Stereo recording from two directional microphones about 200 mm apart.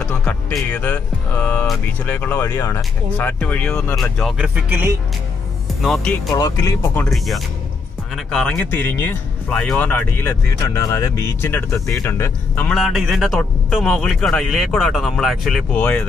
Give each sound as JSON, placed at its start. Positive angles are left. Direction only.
{"t": 0.0, "sound": "speech", "side_deg": 5}
{"t": 4.6, "sound": "speech", "side_deg": -10}
{"t": 5.8, "sound": "speech", "side_deg": 0}
{"t": 6.3, "sound": "speech", "side_deg": 15}
{"t": 7.1, "sound": "speech", "side_deg": 0}